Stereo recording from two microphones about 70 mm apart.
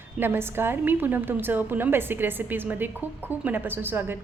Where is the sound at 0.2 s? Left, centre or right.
Right.